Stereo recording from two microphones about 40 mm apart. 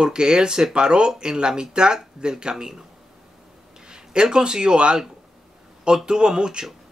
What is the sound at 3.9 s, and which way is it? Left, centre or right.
A man's voice, centre.